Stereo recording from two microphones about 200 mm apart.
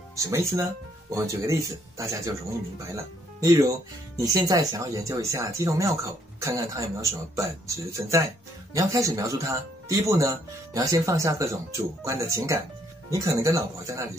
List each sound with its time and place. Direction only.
0.1 s speech: 15° right (ahead or behind)
3.3 s speech: 15° right (ahead or behind)